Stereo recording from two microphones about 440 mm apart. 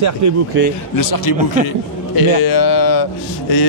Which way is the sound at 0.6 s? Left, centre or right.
Right.